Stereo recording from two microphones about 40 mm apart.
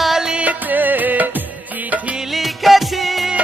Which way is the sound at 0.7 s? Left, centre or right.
Right.